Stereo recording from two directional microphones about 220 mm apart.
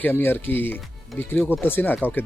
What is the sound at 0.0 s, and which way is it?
Speech, 10° left (ahead or behind).